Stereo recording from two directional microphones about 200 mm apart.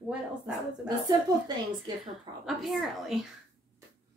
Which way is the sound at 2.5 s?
Centre (ahead or behind).